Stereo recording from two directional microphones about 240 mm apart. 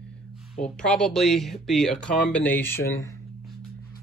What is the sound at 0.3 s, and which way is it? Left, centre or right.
Speech, centre.